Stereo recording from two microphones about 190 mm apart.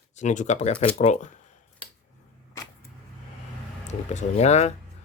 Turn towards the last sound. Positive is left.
turn(degrees=35)  # may be behind; listen again after turning